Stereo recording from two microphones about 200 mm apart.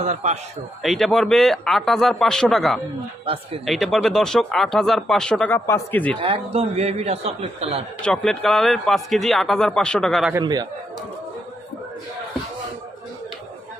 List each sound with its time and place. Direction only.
0.0 s a man's voice: 35° right (ahead or behind)
0.8 s speech: centre (ahead or behind)
6.1 s a man's voice: 25° right (ahead or behind)
8.0 s speech: 5° left (ahead or behind)
10.3 s a man's voice: 20° right (ahead or behind)